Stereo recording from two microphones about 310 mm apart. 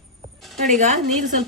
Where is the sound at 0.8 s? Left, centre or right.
Right.